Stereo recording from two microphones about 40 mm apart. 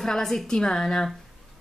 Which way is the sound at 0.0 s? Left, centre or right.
Centre.